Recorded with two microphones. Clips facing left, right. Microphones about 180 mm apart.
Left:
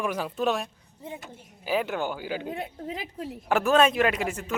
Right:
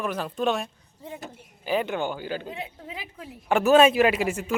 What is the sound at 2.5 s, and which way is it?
Speech, 45° left (ahead or behind).